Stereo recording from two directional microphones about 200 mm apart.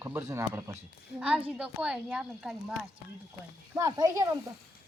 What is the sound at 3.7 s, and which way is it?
Speech, 15° right (ahead or behind).